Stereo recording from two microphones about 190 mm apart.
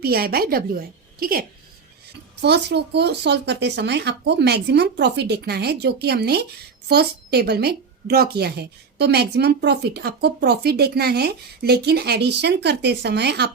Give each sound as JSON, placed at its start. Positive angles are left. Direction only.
{"t": 0.0, "sound": "a woman's voice", "side_deg": -55}